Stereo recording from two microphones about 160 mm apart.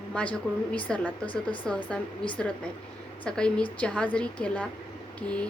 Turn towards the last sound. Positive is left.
turn(degrees=5)  # may be behind; listen again after turning